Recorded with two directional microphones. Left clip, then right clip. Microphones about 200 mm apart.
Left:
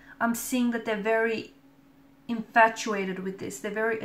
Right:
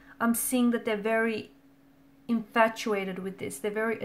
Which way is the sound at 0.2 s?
45° right (ahead or behind).